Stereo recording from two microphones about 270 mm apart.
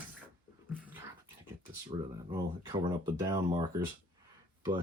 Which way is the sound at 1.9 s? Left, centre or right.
Centre.